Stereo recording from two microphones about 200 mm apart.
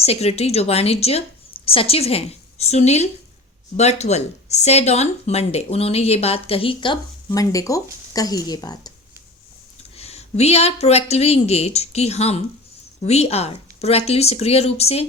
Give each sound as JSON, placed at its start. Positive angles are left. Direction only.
{"t": 0.0, "sound": "a woman's voice", "side_deg": 30}
{"t": 9.9, "sound": "speech", "side_deg": 30}